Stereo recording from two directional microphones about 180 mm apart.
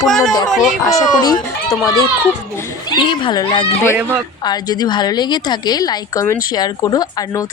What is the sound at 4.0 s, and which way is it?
Speech, 10° right (ahead or behind).